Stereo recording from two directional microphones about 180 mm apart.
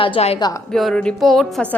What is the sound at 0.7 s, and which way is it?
Speech, centre (ahead or behind).